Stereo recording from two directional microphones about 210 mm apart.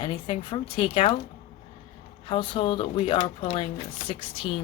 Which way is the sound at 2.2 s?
25° left (ahead or behind).